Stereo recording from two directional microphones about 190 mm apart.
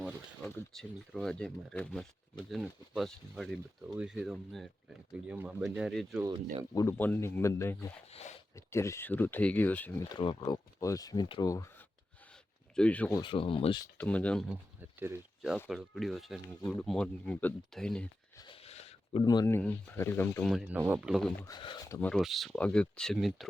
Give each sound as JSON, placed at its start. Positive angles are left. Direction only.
{"t": 0.4, "sound": "speech", "side_deg": 5}
{"t": 6.2, "sound": "speech", "side_deg": -30}
{"t": 6.7, "sound": "speech", "side_deg": 10}
{"t": 8.1, "sound": "speech", "side_deg": 35}
{"t": 8.5, "sound": "speech", "side_deg": 15}
{"t": 10.1, "sound": "speech", "side_deg": 20}
{"t": 12.3, "sound": "a sound", "side_deg": 5}
{"t": 13.1, "sound": "speech", "side_deg": 25}
{"t": 14.0, "sound": "speech", "side_deg": 5}
{"t": 14.8, "sound": "speech", "side_deg": -10}
{"t": 18.3, "sound": "a sound", "side_deg": 25}
{"t": 19.2, "sound": "speech", "side_deg": 20}
{"t": 21.4, "sound": "speech", "side_deg": 25}
{"t": 22.1, "sound": "speech", "side_deg": 0}